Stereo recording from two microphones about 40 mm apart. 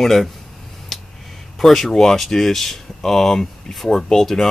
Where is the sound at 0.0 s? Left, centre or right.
Centre.